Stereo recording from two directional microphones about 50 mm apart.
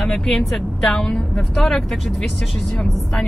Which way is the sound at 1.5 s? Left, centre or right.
Centre.